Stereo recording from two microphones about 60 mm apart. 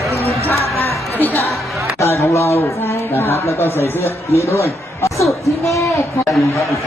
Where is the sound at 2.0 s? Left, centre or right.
Left.